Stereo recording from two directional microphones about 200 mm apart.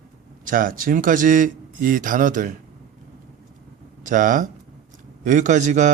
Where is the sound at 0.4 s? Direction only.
45° right (ahead or behind).